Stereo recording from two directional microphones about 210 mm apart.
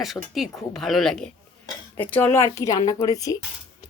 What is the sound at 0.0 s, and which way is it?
Speech, centre (ahead or behind).